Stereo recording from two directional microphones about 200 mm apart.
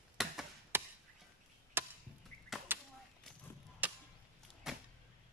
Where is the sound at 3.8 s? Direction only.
10° right (ahead or behind).